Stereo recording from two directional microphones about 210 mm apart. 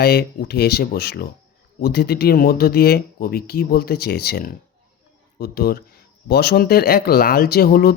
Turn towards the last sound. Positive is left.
turn(degrees=45)  # may be behind; listen again after turning